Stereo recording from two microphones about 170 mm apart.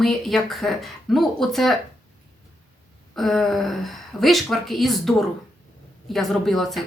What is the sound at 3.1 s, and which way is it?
Speech, centre (ahead or behind).